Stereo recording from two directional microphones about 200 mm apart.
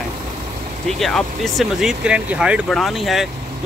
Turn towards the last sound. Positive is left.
turn(degrees=0)  # may be behind; listen again after turning